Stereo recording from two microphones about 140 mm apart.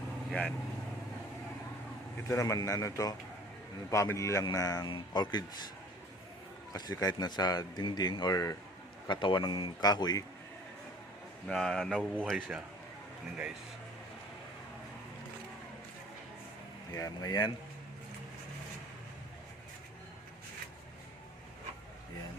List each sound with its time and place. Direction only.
0.3 s speech: 10° left (ahead or behind)
2.2 s a man's voice: 20° left (ahead or behind)
6.7 s a man's voice: 30° left (ahead or behind)
11.4 s speech: 5° left (ahead or behind)
16.9 s speech: 25° left (ahead or behind)